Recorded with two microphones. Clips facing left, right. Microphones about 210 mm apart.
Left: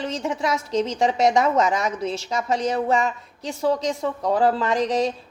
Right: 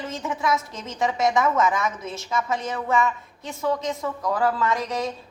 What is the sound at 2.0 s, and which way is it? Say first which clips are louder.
Speech: left 7 dB; 75° left (ahead or behind).